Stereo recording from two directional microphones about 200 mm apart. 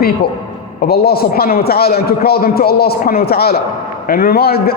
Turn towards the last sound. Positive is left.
turn(degrees=50)  # may be behind; listen again after turning